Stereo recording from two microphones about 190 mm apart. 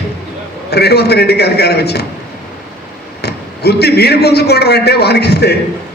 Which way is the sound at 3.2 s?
60° left (ahead or behind).